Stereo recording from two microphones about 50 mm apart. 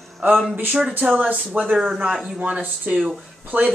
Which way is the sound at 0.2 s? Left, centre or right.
Right.